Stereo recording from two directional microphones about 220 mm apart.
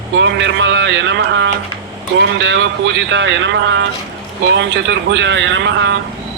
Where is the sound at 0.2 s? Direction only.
55° right (ahead or behind).